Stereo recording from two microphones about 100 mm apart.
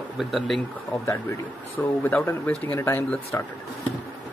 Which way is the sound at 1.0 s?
25° left (ahead or behind).